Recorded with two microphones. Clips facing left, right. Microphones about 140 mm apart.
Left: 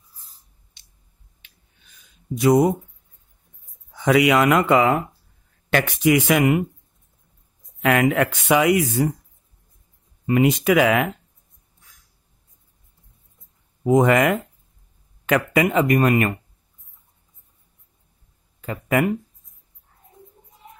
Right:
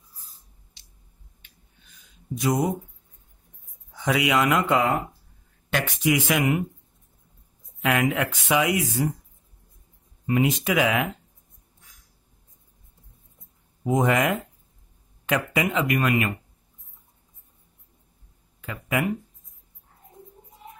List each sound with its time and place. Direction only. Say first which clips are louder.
2.4 s speech: left 8 dB; 70° left (ahead or behind)
4.0 s speech: left 6 dB; 65° left (ahead or behind)
7.8 s speech: left 5 dB; 60° left (ahead or behind)
10.2 s speech: left 5 dB; 65° left (ahead or behind)
13.8 s speech: left 5 dB; 65° left (ahead or behind); by 16.3 s 45° left (ahead or behind)
18.7 s speech: left 6 dB; 50° left (ahead or behind)